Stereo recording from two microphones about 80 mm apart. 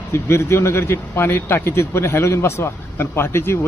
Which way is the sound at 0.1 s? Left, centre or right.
Left.